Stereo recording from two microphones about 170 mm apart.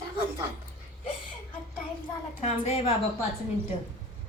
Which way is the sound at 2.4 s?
40° left (ahead or behind).